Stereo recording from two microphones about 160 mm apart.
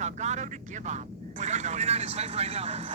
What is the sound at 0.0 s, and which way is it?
Speech, 45° right (ahead or behind).